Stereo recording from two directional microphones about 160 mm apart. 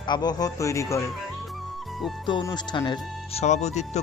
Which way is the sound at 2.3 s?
30° left (ahead or behind).